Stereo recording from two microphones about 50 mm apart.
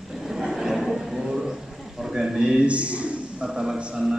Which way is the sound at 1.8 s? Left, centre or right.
Centre.